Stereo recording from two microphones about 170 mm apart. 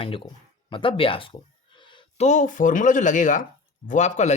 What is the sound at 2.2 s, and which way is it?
Speech, 45° left (ahead or behind).